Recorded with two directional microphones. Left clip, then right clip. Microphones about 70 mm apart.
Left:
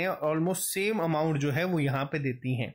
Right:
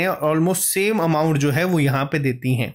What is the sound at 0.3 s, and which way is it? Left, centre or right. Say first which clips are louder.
Speech: right 9 dB; centre.